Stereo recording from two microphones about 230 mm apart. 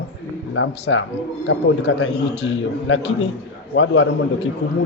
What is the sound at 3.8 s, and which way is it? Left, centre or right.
Speech, left.